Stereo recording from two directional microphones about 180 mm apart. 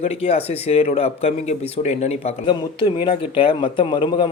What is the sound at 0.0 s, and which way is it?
A man's voice, 35° left (ahead or behind).